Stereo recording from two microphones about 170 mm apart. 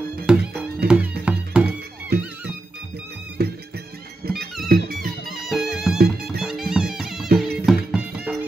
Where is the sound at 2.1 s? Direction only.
70° right (ahead or behind).